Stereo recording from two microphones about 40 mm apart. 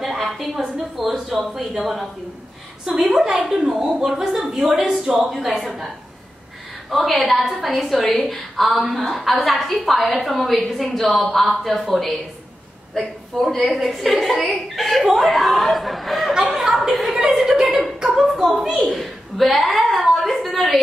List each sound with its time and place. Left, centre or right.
0.0 s a sound: centre
1.4 s speech: centre
3.1 s a woman's voice: centre
6.9 s a woman's voice: centre
16.4 s chuckle: centre
18.2 s a woman's voice: centre
18.9 s a sound: centre